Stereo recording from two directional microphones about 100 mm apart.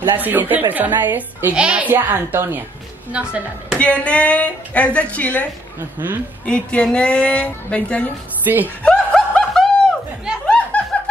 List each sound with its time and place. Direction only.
0.0 s a woman's voice: 20° right (ahead or behind)
3.7 s a woman's voice: 15° left (ahead or behind)
5.8 s a woman's voice: 20° right (ahead or behind)
6.4 s a woman's voice: 10° left (ahead or behind)
8.5 s a woman's voice: 25° right (ahead or behind)
8.8 s snicker: 10° left (ahead or behind)
10.7 s snicker: 15° left (ahead or behind)